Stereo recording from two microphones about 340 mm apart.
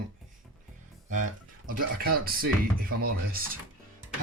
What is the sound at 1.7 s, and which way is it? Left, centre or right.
Speech, right.